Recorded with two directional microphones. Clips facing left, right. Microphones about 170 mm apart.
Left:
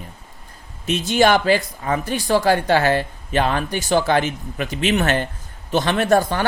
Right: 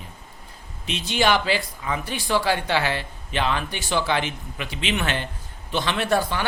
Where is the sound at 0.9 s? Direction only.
45° left (ahead or behind).